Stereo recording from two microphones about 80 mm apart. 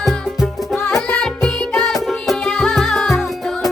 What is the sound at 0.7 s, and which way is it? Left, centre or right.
Music, left.